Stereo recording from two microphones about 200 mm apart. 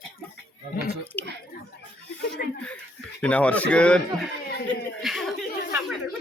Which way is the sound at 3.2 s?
5° left (ahead or behind).